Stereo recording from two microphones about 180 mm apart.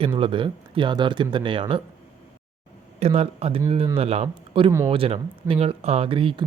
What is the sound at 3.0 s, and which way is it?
Speech, 35° right (ahead or behind).